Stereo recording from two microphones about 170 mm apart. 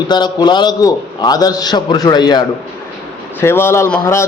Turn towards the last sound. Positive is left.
turn(degrees=15)  # may be behind; listen again after turning